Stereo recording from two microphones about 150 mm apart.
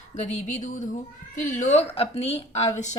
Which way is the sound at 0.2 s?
55° left (ahead or behind).